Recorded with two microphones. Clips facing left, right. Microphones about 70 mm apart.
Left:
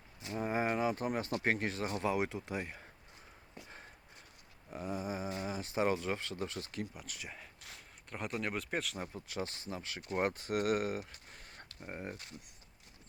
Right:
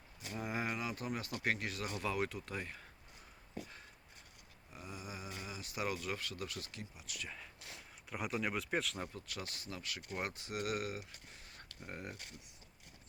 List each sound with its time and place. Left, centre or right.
0.3 s speech: left
4.7 s speech: left
7.2 s speech: centre
8.1 s speech: centre
9.1 s speech: left
11.8 s speech: left